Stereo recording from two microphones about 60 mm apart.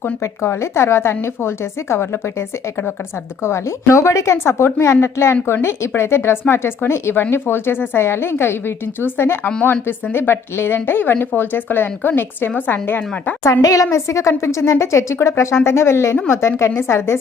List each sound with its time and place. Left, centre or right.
0.2 s a woman's voice: left
3.4 s a woman's voice: left
13.4 s a woman's voice: left
13.9 s a woman's voice: left